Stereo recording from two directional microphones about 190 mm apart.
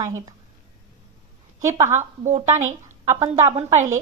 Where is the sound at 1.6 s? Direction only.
15° right (ahead or behind).